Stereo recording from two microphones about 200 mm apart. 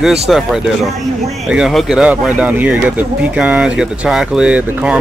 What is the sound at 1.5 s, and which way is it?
Speech, centre (ahead or behind).